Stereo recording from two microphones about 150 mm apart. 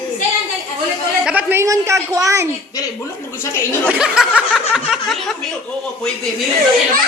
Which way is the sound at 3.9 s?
5° right (ahead or behind).